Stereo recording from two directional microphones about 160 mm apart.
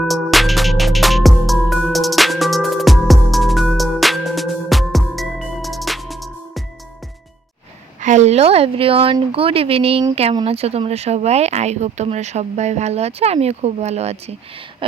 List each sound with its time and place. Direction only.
0.1 s music: centre (ahead or behind)
8.0 s speech: 45° right (ahead or behind)